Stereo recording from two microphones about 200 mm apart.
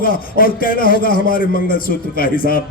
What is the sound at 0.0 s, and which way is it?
A man's voice, 45° left (ahead or behind).